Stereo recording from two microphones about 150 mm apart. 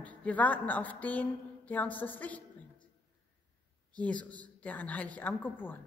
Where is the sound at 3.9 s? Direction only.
10° left (ahead or behind).